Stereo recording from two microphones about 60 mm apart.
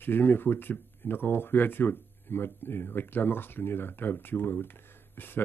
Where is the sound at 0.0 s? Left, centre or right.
Left.